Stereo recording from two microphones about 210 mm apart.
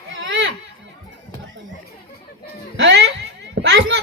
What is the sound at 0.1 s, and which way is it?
Children playing, 60° right (ahead or behind).